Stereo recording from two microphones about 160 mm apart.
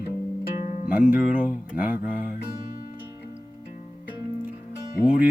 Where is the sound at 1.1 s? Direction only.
10° right (ahead or behind).